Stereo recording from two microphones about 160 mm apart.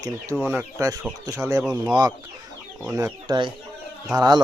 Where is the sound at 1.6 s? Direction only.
5° right (ahead or behind).